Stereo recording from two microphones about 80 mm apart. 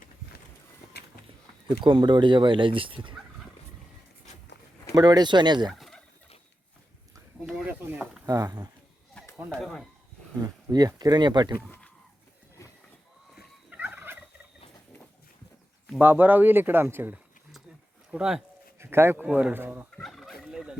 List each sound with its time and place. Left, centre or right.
1.6 s speech: right
4.9 s speech: right
5.7 s fowl: centre
7.4 s snake: centre
7.7 s a sound: right
8.3 s speech: right
9.2 s a sound: centre
9.6 s speech: centre
10.4 s speech: right
13.3 s turkey: centre
16.0 s speech: right
18.1 s speech: centre
18.8 s speech: right
20.0 s a sound: centre